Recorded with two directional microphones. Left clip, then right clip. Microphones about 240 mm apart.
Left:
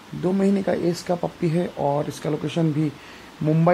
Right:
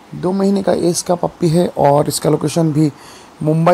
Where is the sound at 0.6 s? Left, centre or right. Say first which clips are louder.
Right 8 dB; right.